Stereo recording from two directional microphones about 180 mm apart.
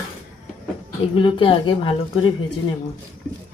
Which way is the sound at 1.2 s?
30° left (ahead or behind).